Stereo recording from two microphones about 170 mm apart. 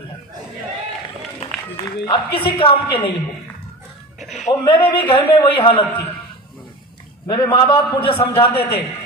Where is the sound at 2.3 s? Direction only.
30° left (ahead or behind).